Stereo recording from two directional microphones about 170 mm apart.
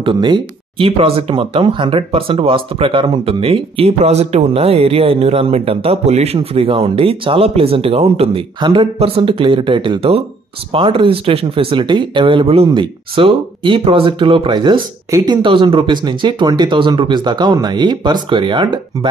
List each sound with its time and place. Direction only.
0.0 s speech: 25° right (ahead or behind)